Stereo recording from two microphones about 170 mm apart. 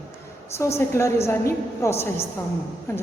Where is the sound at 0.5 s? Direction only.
15° left (ahead or behind).